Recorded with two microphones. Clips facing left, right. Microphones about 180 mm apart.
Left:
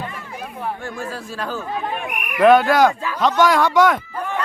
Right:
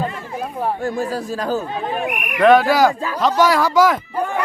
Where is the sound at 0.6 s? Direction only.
40° right (ahead or behind).